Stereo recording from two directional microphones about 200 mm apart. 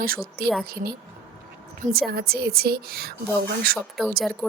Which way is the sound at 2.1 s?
50° right (ahead or behind).